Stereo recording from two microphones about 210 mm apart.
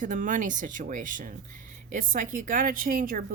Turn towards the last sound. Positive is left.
turn(degrees=-40)  # may be behind; listen again after turning